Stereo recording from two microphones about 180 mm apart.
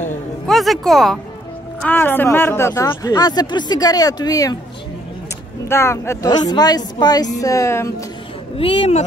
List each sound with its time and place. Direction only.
0.5 s speech: centre (ahead or behind); by 4.6 s 20° left (ahead or behind)
5.7 s speech: 15° left (ahead or behind)
8.5 s speech: 30° left (ahead or behind)